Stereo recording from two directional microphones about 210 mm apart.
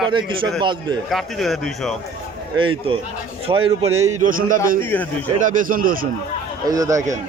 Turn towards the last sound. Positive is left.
turn(degrees=-15)  # may be behind; listen again after turning